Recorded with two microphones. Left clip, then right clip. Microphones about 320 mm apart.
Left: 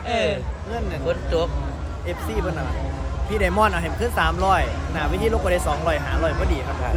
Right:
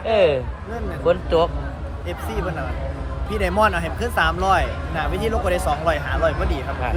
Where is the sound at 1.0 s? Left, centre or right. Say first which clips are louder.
Right 6 dB; right.